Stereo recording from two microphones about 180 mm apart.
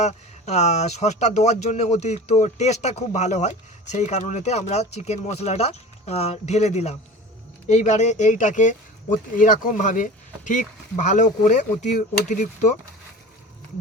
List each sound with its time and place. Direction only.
0.0 s speech: 40° left (ahead or behind)